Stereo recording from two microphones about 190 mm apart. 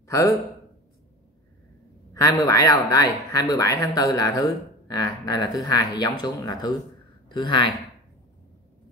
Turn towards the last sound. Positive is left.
turn(degrees=25)  # may be behind; listen again after turning